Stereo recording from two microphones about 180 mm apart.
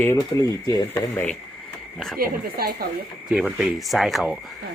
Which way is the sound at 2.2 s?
55° right (ahead or behind).